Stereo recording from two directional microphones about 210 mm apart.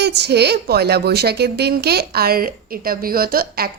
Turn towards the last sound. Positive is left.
turn(degrees=-45)  # may be behind; listen again after turning